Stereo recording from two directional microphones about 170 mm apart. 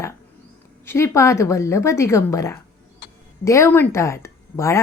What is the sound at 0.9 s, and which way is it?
A woman's voice, 15° left (ahead or behind).